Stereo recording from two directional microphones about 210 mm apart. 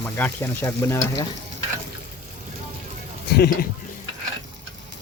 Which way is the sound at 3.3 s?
50° left (ahead or behind).